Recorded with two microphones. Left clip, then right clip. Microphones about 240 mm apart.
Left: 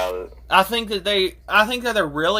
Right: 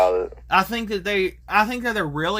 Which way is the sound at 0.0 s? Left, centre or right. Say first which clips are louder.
Right 6 dB; right.